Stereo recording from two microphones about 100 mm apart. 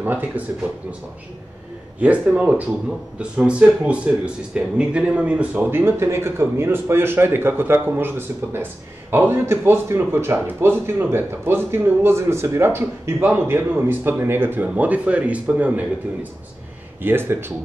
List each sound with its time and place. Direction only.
0.0 s speech: 20° right (ahead or behind)
2.0 s a man's voice: 15° right (ahead or behind)